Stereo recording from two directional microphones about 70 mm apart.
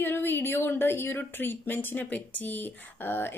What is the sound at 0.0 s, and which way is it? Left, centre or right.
Speech, left.